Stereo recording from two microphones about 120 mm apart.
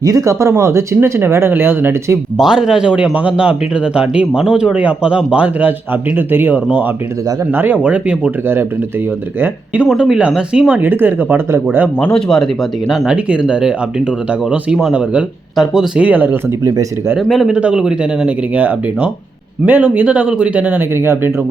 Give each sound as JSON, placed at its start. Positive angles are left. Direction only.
{"t": 0.0, "sound": "speech", "side_deg": -30}
{"t": 2.4, "sound": "speech", "side_deg": -5}
{"t": 11.9, "sound": "speech", "side_deg": 5}
{"t": 13.1, "sound": "speech", "side_deg": -10}
{"t": 17.2, "sound": "speech", "side_deg": 0}